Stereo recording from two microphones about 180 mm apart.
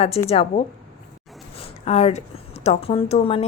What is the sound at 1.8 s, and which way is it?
Speech, 35° left (ahead or behind).